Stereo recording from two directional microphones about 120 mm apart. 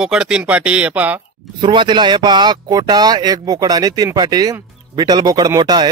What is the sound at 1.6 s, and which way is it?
A man's voice, 40° right (ahead or behind).